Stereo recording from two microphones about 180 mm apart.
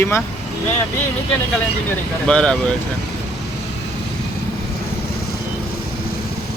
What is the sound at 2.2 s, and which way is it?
Speech, 5° left (ahead or behind).